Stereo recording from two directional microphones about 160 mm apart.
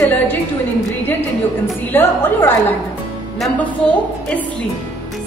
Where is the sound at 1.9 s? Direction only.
15° left (ahead or behind).